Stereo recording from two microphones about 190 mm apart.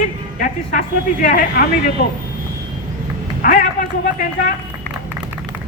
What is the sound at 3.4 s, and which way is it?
Speech, 45° left (ahead or behind).